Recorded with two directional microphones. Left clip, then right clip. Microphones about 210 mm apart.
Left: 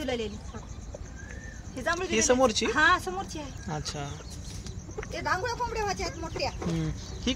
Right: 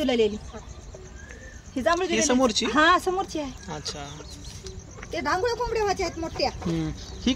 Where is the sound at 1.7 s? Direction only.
50° right (ahead or behind).